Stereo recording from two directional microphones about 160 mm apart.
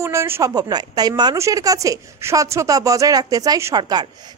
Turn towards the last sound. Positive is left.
turn(degrees=-25)  # may be behind; listen again after turning